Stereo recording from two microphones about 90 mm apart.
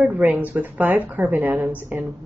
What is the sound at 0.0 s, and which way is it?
A woman's voice, 15° right (ahead or behind).